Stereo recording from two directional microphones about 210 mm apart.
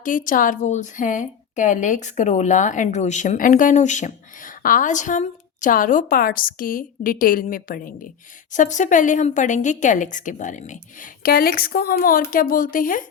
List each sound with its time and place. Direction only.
0.0 s a woman's voice: 40° left (ahead or behind)